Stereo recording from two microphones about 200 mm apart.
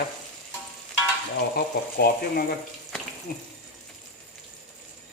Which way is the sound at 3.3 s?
45° left (ahead or behind).